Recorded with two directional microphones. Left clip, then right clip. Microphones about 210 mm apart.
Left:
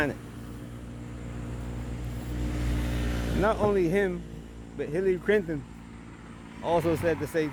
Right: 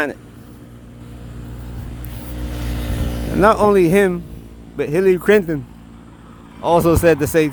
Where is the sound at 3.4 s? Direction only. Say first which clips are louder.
Right 13 dB; 30° right (ahead or behind).